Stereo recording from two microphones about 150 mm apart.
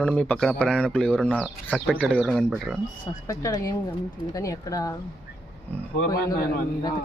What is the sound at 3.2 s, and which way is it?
Speech, 20° left (ahead or behind).